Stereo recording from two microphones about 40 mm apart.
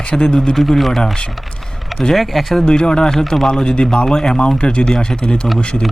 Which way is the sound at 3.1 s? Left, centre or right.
Centre.